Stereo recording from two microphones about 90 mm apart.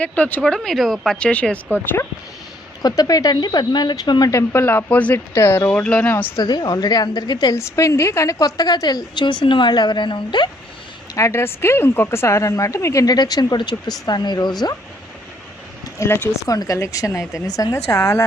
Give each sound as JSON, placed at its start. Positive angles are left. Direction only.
{"t": 0.0, "sound": "speech", "side_deg": 20}
{"t": 2.8, "sound": "a woman's voice", "side_deg": 45}
{"t": 4.3, "sound": "speech", "side_deg": 30}
{"t": 5.3, "sound": "speech", "side_deg": 30}
{"t": 5.8, "sound": "speech", "side_deg": 10}
{"t": 6.1, "sound": "speech", "side_deg": 20}
{"t": 6.4, "sound": "a woman's voice", "side_deg": 50}
{"t": 7.5, "sound": "a woman's voice", "side_deg": 35}
{"t": 11.1, "sound": "a woman's voice", "side_deg": 35}
{"t": 16.0, "sound": "speech", "side_deg": 25}
{"t": 16.5, "sound": "speech", "side_deg": 40}